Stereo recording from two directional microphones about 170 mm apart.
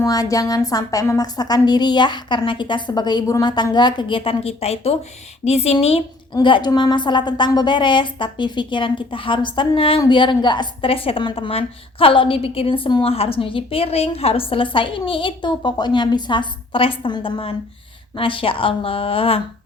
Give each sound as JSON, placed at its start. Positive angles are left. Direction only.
{"t": 0.0, "sound": "a woman's voice", "side_deg": 20}